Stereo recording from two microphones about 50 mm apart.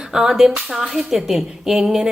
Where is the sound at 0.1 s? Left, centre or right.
Centre.